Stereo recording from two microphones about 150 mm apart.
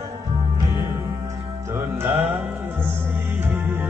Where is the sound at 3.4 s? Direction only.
15° right (ahead or behind).